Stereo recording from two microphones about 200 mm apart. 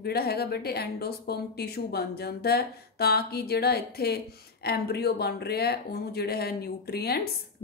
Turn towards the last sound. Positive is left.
turn(degrees=55)  # may be behind; listen again after turning